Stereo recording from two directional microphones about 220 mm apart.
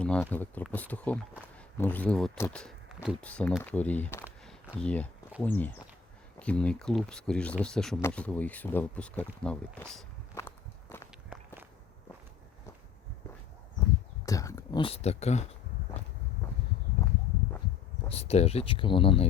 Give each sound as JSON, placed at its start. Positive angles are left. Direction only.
{"t": 0.0, "sound": "speech", "side_deg": 5}
{"t": 10.3, "sound": "walk", "side_deg": 10}
{"t": 14.3, "sound": "a sound", "side_deg": 15}
{"t": 18.1, "sound": "speech", "side_deg": 30}